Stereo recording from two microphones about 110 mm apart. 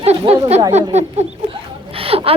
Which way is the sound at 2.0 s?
60° right (ahead or behind).